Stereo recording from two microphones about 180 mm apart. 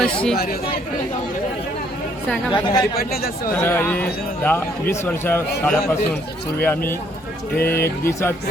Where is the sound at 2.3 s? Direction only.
5° left (ahead or behind).